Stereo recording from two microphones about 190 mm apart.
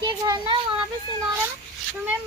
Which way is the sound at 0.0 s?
25° right (ahead or behind).